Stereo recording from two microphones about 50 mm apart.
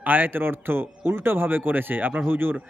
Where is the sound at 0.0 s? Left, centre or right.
Right.